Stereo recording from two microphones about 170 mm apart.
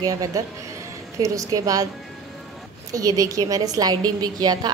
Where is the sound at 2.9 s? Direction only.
20° right (ahead or behind).